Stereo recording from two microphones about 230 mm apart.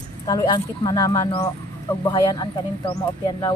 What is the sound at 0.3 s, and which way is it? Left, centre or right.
Speech, centre.